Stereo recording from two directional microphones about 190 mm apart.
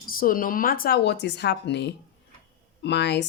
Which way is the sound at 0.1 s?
50° left (ahead or behind).